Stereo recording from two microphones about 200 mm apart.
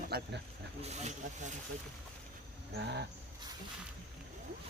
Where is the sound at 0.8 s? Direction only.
35° right (ahead or behind).